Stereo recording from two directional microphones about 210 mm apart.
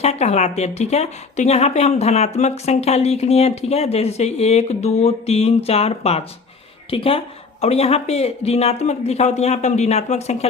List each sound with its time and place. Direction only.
0.0 s a woman's voice: 30° left (ahead or behind)